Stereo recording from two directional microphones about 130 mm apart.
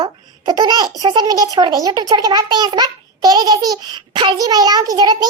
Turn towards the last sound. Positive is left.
turn(degrees=-30)  # may be behind; listen again after turning